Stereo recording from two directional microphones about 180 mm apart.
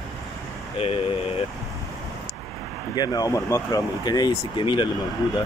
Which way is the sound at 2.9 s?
20° left (ahead or behind).